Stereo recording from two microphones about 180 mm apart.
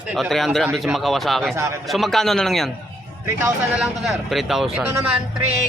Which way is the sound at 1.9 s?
Centre (ahead or behind).